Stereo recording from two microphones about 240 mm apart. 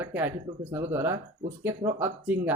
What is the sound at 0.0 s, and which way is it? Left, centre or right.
Speech, centre.